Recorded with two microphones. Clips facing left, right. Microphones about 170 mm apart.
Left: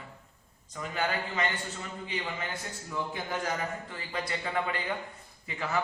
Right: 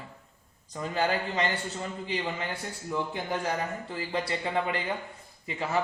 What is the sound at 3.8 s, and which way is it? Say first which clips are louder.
A man's voice: right 5 dB; 30° right (ahead or behind).